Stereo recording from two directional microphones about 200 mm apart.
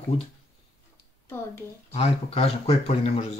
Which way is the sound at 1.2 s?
10° left (ahead or behind).